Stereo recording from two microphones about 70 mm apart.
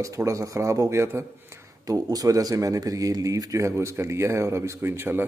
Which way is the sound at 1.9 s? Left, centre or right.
Right.